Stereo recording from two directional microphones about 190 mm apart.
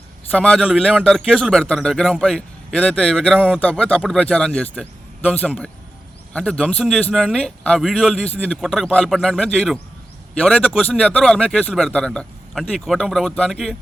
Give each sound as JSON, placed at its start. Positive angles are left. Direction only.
{"t": 0.3, "sound": "speech", "side_deg": 5}